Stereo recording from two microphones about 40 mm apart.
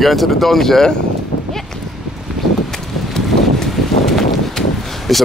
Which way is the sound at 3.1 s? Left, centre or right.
Centre.